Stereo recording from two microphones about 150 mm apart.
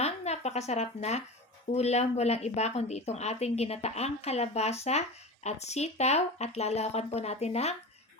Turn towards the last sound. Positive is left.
turn(degrees=45)  # may be behind; listen again after turning